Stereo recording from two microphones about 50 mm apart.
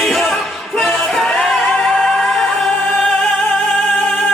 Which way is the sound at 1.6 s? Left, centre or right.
Left.